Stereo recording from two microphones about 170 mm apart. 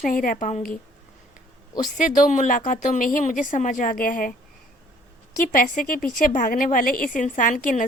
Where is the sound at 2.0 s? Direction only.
50° left (ahead or behind).